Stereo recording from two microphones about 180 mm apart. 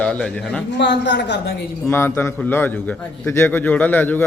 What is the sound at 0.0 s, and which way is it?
Speech, 5° left (ahead or behind).